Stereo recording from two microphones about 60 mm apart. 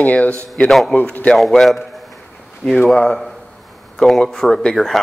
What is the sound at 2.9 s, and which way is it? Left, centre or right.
Speech, centre.